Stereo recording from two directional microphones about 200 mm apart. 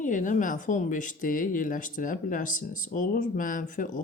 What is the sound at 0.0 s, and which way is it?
Speech, 40° left (ahead or behind).